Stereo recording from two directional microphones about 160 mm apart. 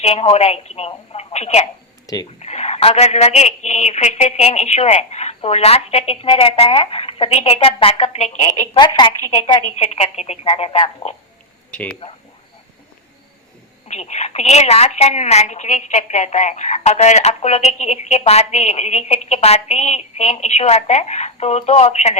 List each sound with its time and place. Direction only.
0.0 s a woman's voice: 40° left (ahead or behind)
2.1 s speech: 20° left (ahead or behind)
2.4 s a woman's voice: 40° left (ahead or behind)
9.0 s a woman's voice: 30° left (ahead or behind)
9.6 s a woman's voice: 40° left (ahead or behind)
11.7 s speech: 10° left (ahead or behind)
13.8 s a woman's voice: 45° left (ahead or behind)